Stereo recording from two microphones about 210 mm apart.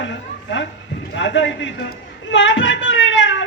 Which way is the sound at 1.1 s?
60° left (ahead or behind).